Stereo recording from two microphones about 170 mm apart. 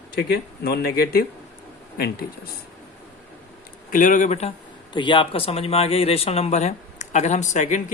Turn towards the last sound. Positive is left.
turn(degrees=45)  # may be behind; listen again after turning